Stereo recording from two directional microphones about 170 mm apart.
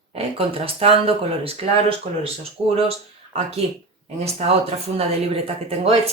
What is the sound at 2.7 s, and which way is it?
Speech, 35° right (ahead or behind).